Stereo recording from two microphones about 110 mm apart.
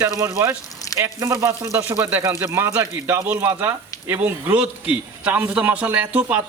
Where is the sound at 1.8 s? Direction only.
15° right (ahead or behind).